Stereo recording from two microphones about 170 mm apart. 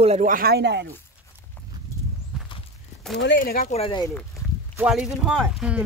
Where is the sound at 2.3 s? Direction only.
5° right (ahead or behind).